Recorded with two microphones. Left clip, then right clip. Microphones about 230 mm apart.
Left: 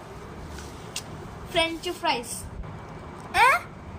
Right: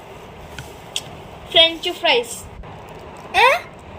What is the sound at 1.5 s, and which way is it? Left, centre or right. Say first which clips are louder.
Speech: right 11 dB; centre.